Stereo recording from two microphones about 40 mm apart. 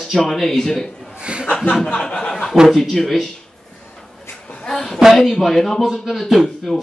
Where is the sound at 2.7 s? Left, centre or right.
Centre.